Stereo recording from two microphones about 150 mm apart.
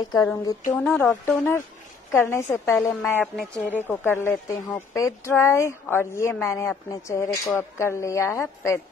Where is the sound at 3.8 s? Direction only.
15° left (ahead or behind).